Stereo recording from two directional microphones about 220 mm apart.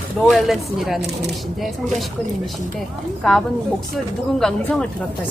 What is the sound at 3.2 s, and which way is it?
Speech, centre (ahead or behind).